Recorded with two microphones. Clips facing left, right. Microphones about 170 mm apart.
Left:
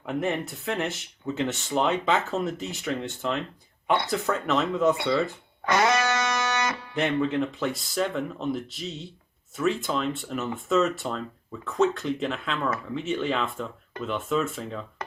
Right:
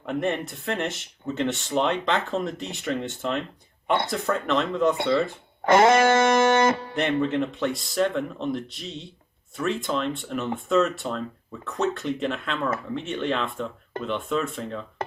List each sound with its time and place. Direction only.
0.0 s speech: centre (ahead or behind)
6.0 s music: 50° right (ahead or behind)
6.9 s speech: centre (ahead or behind)